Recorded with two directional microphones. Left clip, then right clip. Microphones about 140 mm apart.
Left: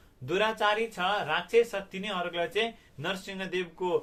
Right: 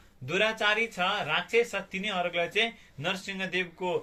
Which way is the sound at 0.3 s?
45° left (ahead or behind).